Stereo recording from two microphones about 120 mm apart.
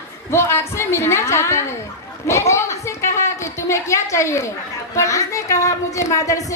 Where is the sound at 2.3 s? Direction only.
25° left (ahead or behind).